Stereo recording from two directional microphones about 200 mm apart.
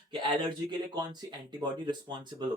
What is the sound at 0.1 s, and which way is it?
Speech, 25° right (ahead or behind).